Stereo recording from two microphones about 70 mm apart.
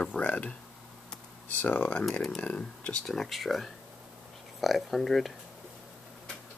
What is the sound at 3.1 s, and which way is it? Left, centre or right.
Speech, centre.